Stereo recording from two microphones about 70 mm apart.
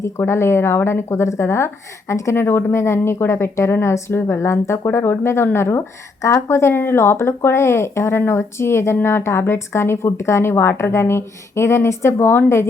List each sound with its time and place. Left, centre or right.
0.3 s a woman's voice: left